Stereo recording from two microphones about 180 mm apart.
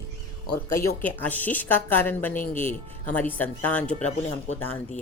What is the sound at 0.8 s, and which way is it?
Speech, 10° left (ahead or behind).